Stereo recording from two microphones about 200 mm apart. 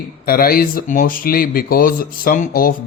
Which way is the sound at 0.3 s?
50° left (ahead or behind).